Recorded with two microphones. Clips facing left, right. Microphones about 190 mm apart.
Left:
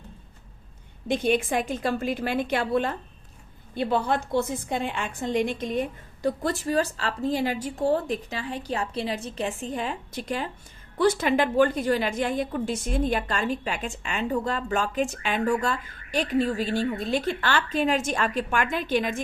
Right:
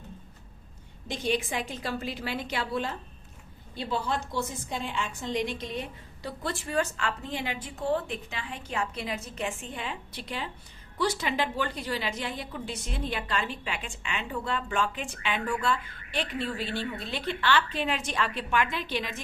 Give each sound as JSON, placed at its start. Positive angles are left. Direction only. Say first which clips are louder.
{"t": 1.0, "sound": "a woman's voice", "louder": "left 6 dB", "side_deg": 55}